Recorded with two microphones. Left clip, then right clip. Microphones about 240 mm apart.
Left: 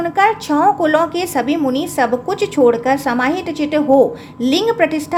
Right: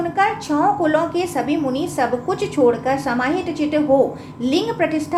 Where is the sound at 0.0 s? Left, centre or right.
Left.